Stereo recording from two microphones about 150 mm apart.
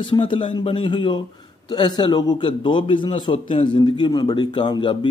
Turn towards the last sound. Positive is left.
turn(degrees=30)  # may be behind; listen again after turning